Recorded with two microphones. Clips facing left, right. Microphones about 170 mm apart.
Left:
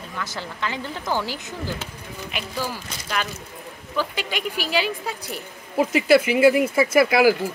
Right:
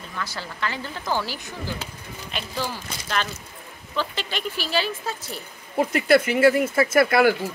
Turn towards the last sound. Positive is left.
turn(degrees=5)  # may be behind; listen again after turning